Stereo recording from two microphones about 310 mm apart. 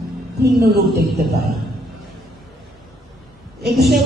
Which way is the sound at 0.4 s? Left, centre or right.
Right.